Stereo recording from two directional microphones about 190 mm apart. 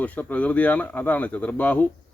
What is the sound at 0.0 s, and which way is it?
Speech, 10° left (ahead or behind).